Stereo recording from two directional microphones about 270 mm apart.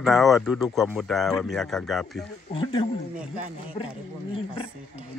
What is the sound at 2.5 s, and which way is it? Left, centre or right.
Speech, centre.